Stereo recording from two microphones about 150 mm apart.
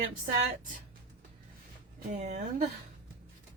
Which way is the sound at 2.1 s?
50° right (ahead or behind).